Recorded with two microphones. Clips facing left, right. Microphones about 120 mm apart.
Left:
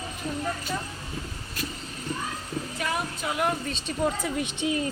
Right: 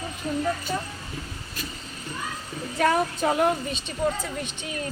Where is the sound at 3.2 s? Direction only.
35° right (ahead or behind).